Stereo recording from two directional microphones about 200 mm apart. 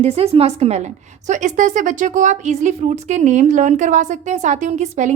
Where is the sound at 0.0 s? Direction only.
30° right (ahead or behind).